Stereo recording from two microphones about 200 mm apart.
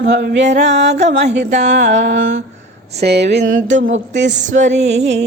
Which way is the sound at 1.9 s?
60° right (ahead or behind).